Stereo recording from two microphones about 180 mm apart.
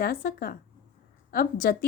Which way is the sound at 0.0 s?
55° left (ahead or behind).